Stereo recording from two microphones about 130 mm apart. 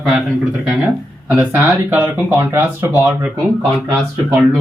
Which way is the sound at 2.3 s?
15° right (ahead or behind).